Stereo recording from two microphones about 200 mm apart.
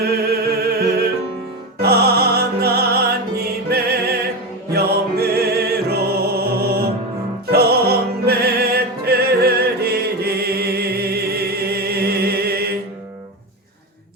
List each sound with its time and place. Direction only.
0.0 s music: 50° right (ahead or behind)